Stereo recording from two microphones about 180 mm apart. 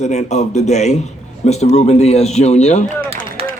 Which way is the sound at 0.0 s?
40° left (ahead or behind).